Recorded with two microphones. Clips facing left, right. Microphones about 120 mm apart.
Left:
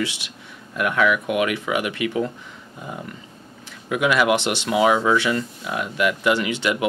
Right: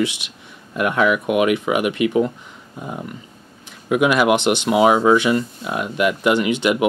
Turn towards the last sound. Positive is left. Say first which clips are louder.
# right 4 dB
turn(degrees=-20)  # may be behind; listen again after turning